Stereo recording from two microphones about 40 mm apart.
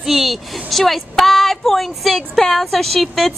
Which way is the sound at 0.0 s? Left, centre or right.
Centre.